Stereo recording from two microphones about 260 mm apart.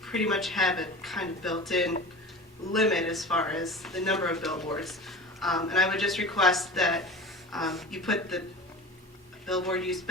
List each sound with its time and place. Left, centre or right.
0.0 s speech: centre
9.5 s speech: centre